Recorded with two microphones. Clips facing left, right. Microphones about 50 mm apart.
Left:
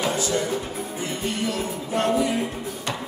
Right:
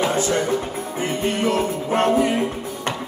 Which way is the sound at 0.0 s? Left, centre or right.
Right.